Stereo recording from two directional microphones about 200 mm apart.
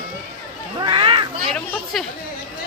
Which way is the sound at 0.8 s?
25° right (ahead or behind).